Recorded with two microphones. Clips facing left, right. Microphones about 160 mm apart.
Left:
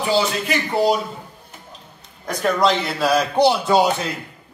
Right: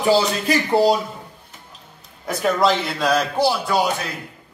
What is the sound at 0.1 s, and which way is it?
Speech, 35° right (ahead or behind).